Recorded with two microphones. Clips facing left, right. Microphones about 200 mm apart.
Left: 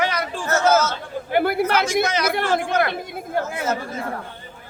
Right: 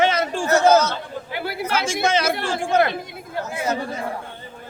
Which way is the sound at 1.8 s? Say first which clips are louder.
Even; 25° right (ahead or behind).